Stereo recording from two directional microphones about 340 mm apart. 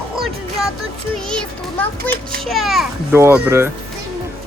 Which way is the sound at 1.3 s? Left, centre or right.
Centre.